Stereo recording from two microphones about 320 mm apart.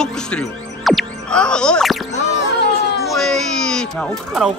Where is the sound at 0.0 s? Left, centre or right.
Centre.